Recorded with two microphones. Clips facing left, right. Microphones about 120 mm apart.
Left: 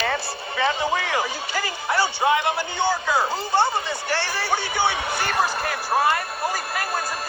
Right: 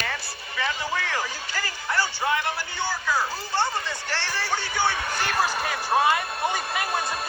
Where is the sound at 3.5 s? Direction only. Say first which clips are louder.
Left 5 dB; 15° left (ahead or behind).